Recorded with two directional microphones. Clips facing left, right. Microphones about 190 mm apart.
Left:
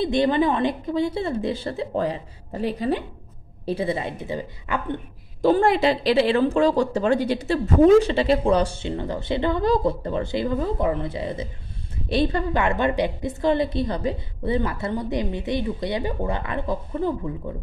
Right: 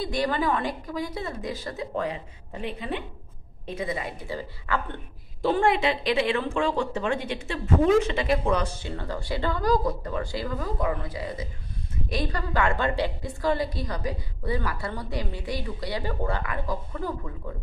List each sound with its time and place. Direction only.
0.0 s a woman's voice: 25° left (ahead or behind)
5.4 s a woman's voice: 40° left (ahead or behind); by 17.3 s 25° left (ahead or behind)